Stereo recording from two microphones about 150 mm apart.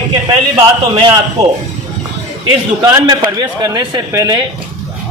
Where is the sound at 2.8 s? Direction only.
25° right (ahead or behind).